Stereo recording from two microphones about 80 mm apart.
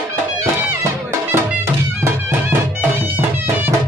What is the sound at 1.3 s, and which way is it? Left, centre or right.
Music, right.